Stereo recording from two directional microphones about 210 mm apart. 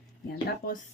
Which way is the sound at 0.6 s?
45° left (ahead or behind).